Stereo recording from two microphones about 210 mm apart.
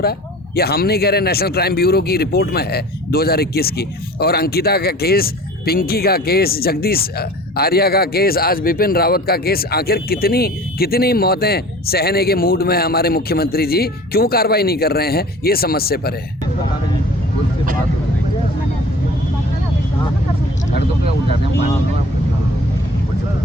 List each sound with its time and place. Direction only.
0.0 s speech: 50° left (ahead or behind)